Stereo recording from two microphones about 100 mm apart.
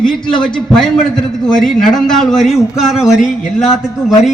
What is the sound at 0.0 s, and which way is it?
Speech, 50° left (ahead or behind).